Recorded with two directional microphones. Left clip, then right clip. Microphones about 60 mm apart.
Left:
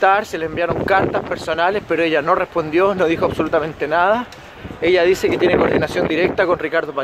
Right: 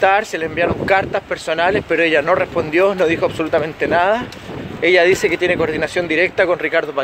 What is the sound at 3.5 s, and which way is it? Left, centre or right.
Speech, left.